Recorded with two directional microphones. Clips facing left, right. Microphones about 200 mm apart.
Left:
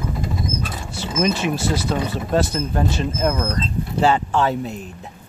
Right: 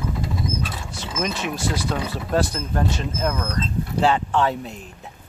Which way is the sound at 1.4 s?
25° left (ahead or behind).